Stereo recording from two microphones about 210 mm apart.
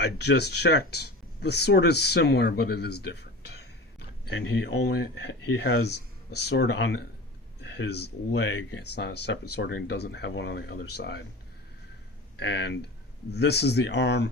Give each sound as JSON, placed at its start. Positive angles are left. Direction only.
{"t": 0.0, "sound": "speech", "side_deg": 50}
{"t": 12.4, "sound": "speech", "side_deg": 55}